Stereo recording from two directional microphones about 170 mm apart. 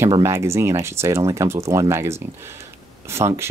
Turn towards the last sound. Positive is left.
turn(degrees=-15)  # may be behind; listen again after turning